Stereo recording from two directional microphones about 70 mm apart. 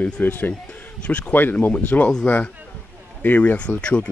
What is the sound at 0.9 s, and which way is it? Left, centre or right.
Speech, centre.